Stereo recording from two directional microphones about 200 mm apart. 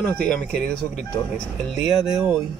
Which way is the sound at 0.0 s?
5° left (ahead or behind).